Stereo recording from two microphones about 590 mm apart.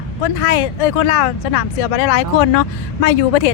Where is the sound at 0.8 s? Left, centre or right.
Left.